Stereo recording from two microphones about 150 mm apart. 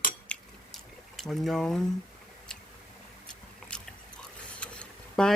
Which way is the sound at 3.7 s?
5° left (ahead or behind).